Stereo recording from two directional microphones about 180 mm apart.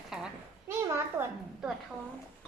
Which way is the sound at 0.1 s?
Centre (ahead or behind).